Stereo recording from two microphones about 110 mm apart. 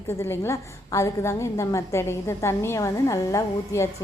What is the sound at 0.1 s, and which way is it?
A woman's voice, 25° left (ahead or behind).